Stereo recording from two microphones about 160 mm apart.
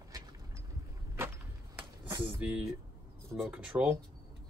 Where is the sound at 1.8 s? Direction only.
15° right (ahead or behind).